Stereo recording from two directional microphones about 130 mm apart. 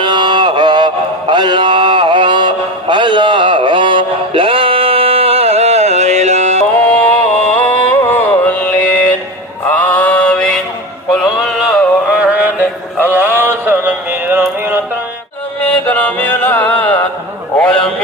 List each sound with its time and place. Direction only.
0.0 s mantra: 35° right (ahead or behind)
1.3 s music: 35° right (ahead or behind); by 6.6 s 60° right (ahead or behind)
7.4 s music: 10° left (ahead or behind)
7.9 s carnatic music: 15° left (ahead or behind)
9.6 s mantra: 10° left (ahead or behind)
11.1 s music: centre (ahead or behind)
12.2 s mantra: 10° right (ahead or behind)
15.9 s music: 10° left (ahead or behind)
17.6 s a sound: 5° left (ahead or behind)